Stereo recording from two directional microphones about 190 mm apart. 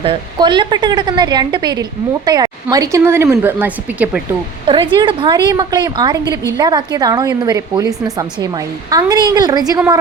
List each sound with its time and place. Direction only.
0.0 s a woman's voice: 25° right (ahead or behind); by 4.2 s 10° right (ahead or behind)
4.6 s a woman's voice: 25° right (ahead or behind)